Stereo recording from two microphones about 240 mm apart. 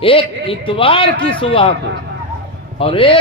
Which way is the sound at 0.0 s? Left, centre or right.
Left.